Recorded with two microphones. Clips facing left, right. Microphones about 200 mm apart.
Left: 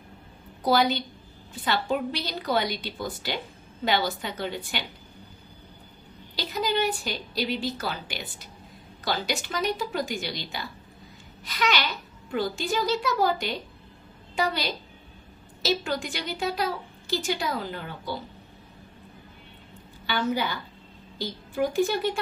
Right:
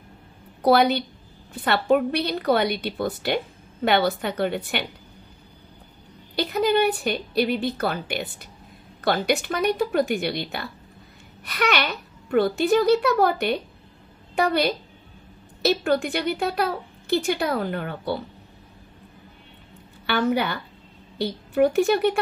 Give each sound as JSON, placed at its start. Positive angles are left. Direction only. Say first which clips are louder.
{"t": 0.6, "sound": "a woman's voice", "louder": "right 5 dB", "side_deg": -60}
{"t": 6.3, "sound": "a woman's voice", "louder": "right 7 dB", "side_deg": -60}
{"t": 20.1, "sound": "a woman's voice", "louder": "right 5 dB", "side_deg": -65}